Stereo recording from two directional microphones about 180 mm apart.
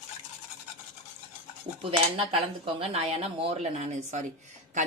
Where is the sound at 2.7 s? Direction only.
35° right (ahead or behind).